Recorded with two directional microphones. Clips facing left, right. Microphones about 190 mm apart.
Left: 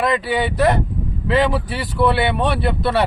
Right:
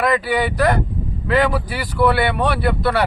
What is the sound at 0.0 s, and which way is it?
Speech, 25° left (ahead or behind).